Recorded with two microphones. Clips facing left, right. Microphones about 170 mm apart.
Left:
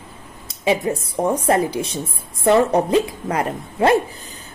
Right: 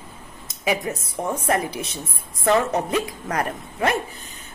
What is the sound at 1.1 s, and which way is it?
A woman's voice, 35° left (ahead or behind).